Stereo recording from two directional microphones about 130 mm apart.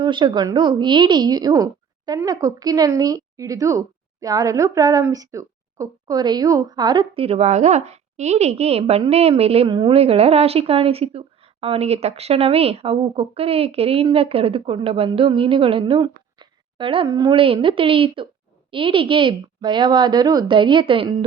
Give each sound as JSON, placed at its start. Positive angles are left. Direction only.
{"t": 0.0, "sound": "a woman's voice", "side_deg": -35}
{"t": 17.1, "sound": "speech", "side_deg": -30}
{"t": 17.3, "sound": "a woman's voice", "side_deg": -45}